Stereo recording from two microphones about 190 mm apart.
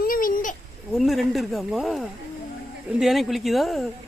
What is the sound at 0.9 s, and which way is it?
Speech, centre (ahead or behind).